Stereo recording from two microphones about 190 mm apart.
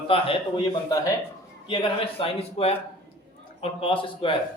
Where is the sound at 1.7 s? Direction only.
30° left (ahead or behind).